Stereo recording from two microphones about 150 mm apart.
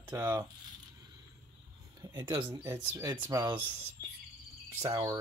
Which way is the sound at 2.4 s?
15° right (ahead or behind).